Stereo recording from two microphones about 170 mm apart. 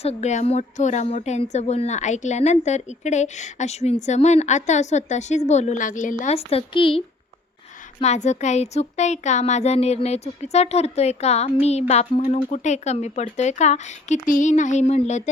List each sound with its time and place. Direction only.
0.0 s speech: 40° left (ahead or behind)
6.3 s speech: 35° left (ahead or behind)
8.0 s speech: 40° left (ahead or behind)